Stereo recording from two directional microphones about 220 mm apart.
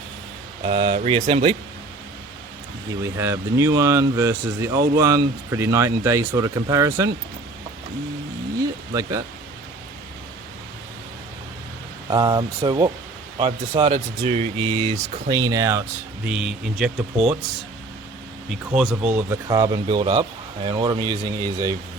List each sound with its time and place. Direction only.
0.6 s speech: 20° right (ahead or behind)
3.2 s speech: 10° right (ahead or behind)
8.9 s speech: 15° right (ahead or behind)
12.1 s speech: 20° right (ahead or behind)
15.3 s speech: 15° right (ahead or behind)
18.4 s speech: centre (ahead or behind); by 21.8 s 15° right (ahead or behind)